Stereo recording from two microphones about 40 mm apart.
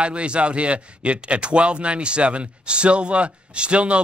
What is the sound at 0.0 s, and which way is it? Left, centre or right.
A man's voice, right.